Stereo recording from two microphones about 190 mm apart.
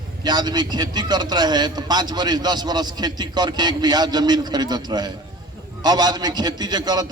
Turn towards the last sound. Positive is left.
turn(degrees=-20)  # may be behind; listen again after turning